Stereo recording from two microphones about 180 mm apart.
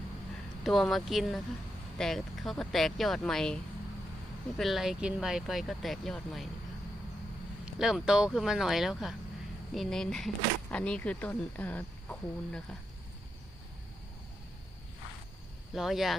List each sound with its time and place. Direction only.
0.6 s speech: centre (ahead or behind)
7.6 s speech: centre (ahead or behind)
15.7 s speech: centre (ahead or behind)